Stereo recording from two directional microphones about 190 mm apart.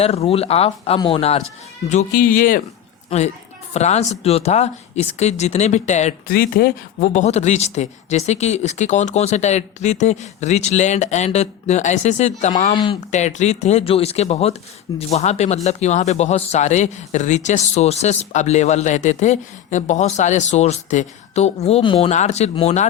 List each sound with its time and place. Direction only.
0.0 s speech: 30° left (ahead or behind)
2.1 s speech: 50° left (ahead or behind)
3.1 s speech: 30° left (ahead or behind)
6.3 s speech: 50° left (ahead or behind)
12.7 s speech: 25° left (ahead or behind)
13.1 s speech: 40° left (ahead or behind)